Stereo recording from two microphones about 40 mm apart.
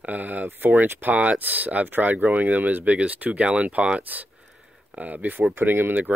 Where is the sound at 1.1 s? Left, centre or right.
Right.